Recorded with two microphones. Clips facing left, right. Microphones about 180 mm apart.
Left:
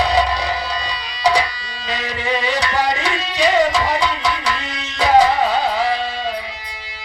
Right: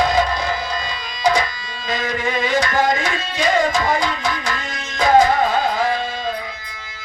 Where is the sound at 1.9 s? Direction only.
45° right (ahead or behind).